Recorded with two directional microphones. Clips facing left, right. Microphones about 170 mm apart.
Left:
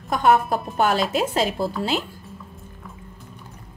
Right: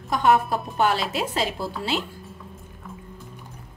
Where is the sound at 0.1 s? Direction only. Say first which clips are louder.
Left 2 dB; 50° left (ahead or behind).